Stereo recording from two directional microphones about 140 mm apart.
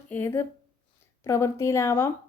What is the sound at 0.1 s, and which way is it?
A woman's voice, 15° left (ahead or behind).